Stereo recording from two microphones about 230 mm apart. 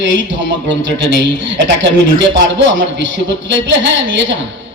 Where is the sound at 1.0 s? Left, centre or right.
Right.